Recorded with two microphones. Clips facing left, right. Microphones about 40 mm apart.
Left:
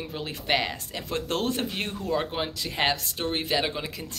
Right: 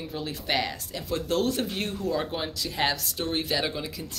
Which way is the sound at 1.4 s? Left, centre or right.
Left.